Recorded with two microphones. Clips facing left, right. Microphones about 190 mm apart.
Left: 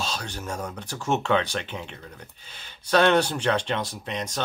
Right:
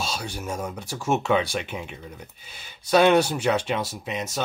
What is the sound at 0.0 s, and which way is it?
Speech, 10° right (ahead or behind).